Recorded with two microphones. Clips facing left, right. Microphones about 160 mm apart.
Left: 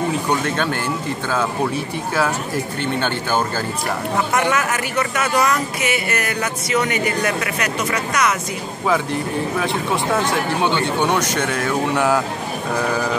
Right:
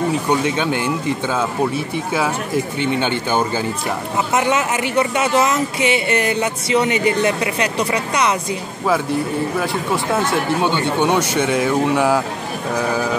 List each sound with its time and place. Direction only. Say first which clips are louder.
0.6 s speech: right 2 dB; 15° right (ahead or behind)
10.1 s speech: right 3 dB; 10° right (ahead or behind)